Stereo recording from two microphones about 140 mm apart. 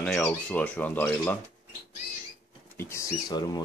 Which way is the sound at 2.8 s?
20° left (ahead or behind).